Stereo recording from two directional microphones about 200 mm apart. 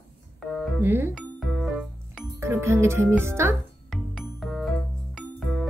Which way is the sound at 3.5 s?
Centre (ahead or behind).